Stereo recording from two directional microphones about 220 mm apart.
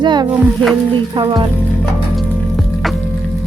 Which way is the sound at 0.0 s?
20° right (ahead or behind).